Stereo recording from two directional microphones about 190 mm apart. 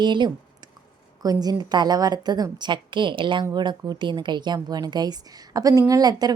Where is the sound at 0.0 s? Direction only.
25° right (ahead or behind).